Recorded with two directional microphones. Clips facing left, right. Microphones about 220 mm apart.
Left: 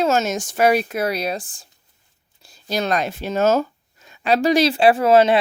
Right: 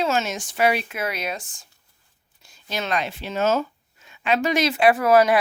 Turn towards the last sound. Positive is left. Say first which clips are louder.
# left 3 dB
turn(degrees=25)  # may be behind; listen again after turning